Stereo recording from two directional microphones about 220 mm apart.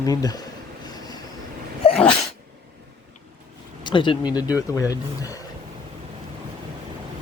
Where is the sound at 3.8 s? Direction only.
20° left (ahead or behind).